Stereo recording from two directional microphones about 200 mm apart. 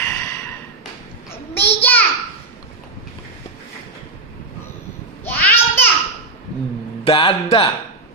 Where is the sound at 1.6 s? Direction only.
10° left (ahead or behind).